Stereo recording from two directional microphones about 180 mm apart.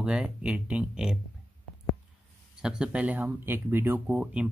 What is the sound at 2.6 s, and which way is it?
Speech, 5° right (ahead or behind).